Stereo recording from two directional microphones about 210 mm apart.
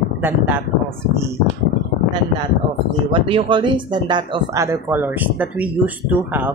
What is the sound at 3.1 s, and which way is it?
Speech, 25° right (ahead or behind).